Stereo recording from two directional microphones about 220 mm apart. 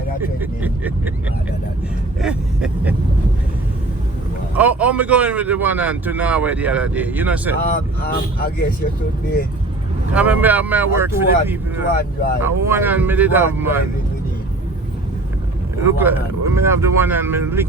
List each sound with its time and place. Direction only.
0.3 s a man's voice: 10° right (ahead or behind)
2.2 s a sound: 5° right (ahead or behind)
4.5 s a man's voice: 5° right (ahead or behind)
8.0 s speech: 45° left (ahead or behind)
10.1 s a man's voice: 5° right (ahead or behind)
11.9 s speech: 40° left (ahead or behind)
12.4 s a man's voice: 10° right (ahead or behind)
15.8 s a man's voice: 10° right (ahead or behind)